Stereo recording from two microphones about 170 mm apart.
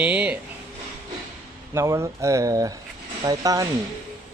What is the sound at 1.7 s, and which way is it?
Speech, 15° right (ahead or behind).